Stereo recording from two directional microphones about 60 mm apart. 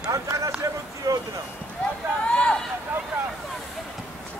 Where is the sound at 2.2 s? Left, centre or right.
Left.